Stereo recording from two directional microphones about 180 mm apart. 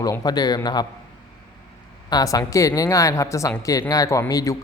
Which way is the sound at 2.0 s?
20° left (ahead or behind).